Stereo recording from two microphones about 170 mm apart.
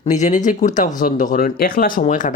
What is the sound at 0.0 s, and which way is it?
Speech, 45° left (ahead or behind).